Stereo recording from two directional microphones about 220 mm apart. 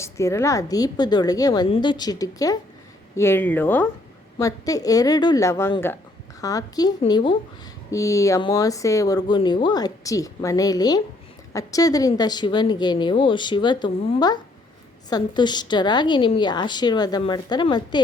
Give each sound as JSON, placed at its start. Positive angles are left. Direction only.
{"t": 0.0, "sound": "a woman's voice", "side_deg": 15}